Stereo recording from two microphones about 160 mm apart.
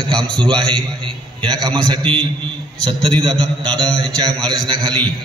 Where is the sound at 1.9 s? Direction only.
30° right (ahead or behind).